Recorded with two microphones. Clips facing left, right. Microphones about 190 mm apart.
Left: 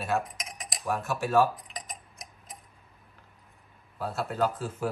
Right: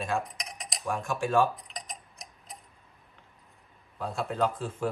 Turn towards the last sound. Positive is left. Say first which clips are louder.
# even
turn(degrees=5)  # may be behind; listen again after turning